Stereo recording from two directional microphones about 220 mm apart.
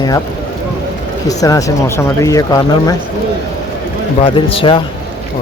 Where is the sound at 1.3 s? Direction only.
15° left (ahead or behind).